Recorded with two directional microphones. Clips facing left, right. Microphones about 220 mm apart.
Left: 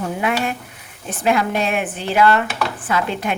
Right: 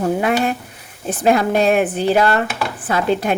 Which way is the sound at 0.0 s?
35° right (ahead or behind).